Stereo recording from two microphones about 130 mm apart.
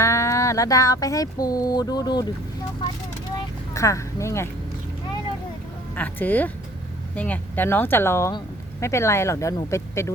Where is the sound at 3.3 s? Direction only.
25° left (ahead or behind).